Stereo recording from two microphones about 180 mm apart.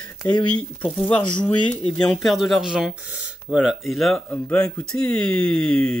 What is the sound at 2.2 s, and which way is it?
Speech, centre (ahead or behind).